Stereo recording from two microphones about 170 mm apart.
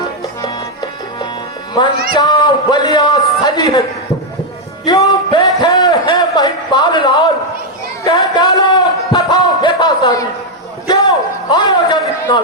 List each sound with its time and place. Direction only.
0.4 s music: 25° left (ahead or behind)
2.1 s a man's voice: 25° left (ahead or behind)
4.9 s a man's voice: 20° left (ahead or behind)
8.1 s a sound: 25° left (ahead or behind)